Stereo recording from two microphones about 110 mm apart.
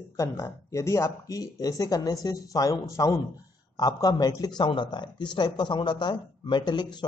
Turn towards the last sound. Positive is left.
turn(degrees=40)  # may be behind; listen again after turning